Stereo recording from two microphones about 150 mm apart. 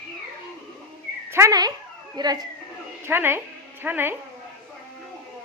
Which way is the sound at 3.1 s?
15° right (ahead or behind).